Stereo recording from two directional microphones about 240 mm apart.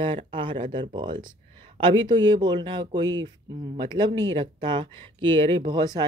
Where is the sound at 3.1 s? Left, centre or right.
Right.